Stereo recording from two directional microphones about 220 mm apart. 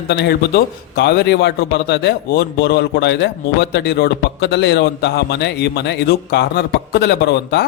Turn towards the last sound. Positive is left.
turn(degrees=45)  # may be behind; listen again after turning